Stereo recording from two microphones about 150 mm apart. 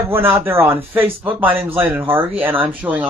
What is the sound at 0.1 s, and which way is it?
Speech, 15° right (ahead or behind).